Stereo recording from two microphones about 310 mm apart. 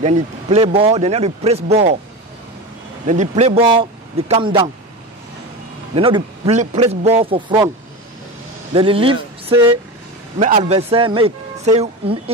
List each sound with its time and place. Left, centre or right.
0.0 s speech: right
3.1 s speech: right
5.9 s speech: centre
8.7 s speech: centre